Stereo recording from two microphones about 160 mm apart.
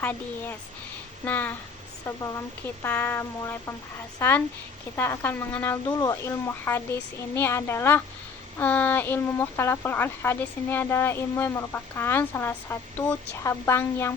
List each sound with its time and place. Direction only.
0.0 s speech: 15° left (ahead or behind)